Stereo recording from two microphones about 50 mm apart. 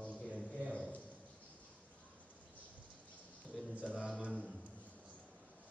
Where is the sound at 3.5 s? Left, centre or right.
Centre.